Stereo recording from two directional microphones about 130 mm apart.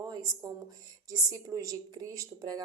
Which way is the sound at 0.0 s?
25° right (ahead or behind).